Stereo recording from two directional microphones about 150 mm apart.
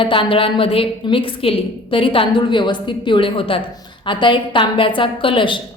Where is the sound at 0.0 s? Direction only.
35° left (ahead or behind).